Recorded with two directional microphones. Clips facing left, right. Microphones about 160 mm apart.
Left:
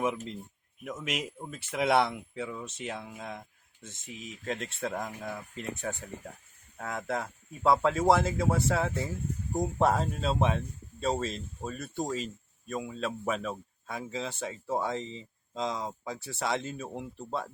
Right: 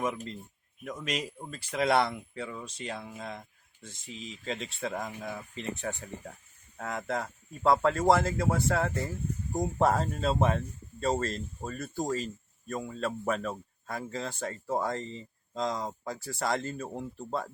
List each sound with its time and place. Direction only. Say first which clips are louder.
0.9 s speech: even; 5° left (ahead or behind)
4.4 s speech: left 1 dB; centre (ahead or behind)